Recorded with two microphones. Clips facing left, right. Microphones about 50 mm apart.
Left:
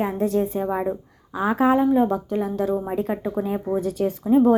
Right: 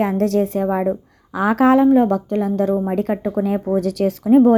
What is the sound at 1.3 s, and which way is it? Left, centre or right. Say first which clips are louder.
Speech: right 5 dB; right.